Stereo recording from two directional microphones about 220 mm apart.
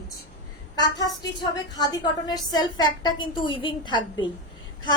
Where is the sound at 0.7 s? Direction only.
15° left (ahead or behind).